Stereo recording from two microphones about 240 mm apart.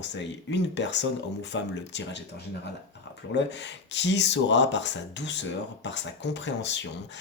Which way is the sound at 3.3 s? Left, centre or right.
Left.